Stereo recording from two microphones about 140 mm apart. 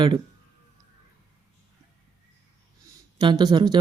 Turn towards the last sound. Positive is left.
turn(degrees=-30)  # may be behind; listen again after turning